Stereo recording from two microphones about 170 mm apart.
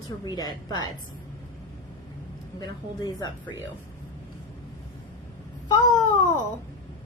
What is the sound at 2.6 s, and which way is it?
Speech, 25° left (ahead or behind).